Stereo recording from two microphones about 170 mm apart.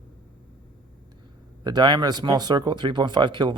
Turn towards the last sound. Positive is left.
turn(degrees=-30)  # may be behind; listen again after turning